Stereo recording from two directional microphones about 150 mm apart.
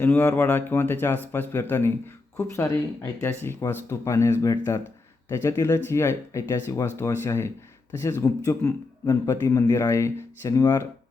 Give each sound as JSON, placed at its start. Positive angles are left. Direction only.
{"t": 0.0, "sound": "a man's voice", "side_deg": 15}